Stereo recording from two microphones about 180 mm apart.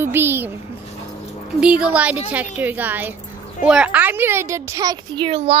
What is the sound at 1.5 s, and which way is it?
Speech, 5° right (ahead or behind).